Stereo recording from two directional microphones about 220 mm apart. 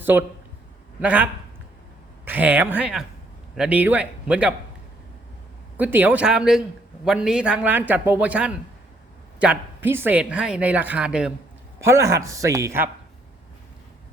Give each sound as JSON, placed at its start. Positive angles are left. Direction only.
{"t": 0.0, "sound": "a man's voice", "side_deg": -10}
{"t": 5.7, "sound": "a man's voice", "side_deg": -10}